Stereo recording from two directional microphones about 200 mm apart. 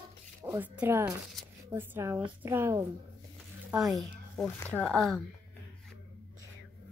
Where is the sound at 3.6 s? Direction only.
Centre (ahead or behind).